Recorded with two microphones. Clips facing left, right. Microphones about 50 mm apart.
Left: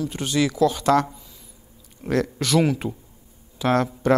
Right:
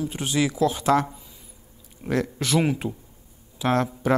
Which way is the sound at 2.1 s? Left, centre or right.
Centre.